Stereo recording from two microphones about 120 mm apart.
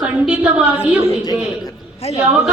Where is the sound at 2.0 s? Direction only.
60° left (ahead or behind).